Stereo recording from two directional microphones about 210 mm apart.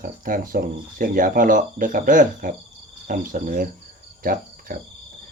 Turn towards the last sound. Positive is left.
turn(degrees=-40)  # may be behind; listen again after turning